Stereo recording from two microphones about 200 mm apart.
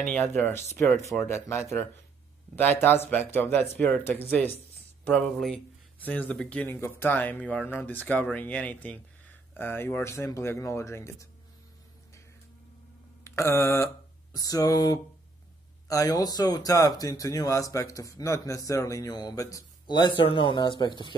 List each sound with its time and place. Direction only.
0.0 s speech: 10° left (ahead or behind)
13.2 s mantra: 15° left (ahead or behind)
14.3 s speech: 15° left (ahead or behind)